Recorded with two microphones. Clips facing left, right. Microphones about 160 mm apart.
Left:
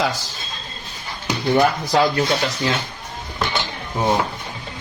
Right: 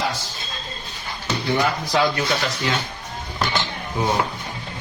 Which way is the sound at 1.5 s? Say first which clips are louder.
Left 5 dB; 50° left (ahead or behind).